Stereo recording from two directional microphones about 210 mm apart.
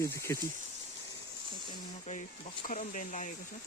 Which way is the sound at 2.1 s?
35° left (ahead or behind).